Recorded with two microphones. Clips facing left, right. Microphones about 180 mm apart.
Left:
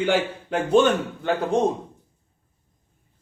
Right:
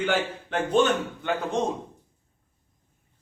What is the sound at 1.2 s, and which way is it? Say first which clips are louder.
Speech: left 4 dB; 35° left (ahead or behind).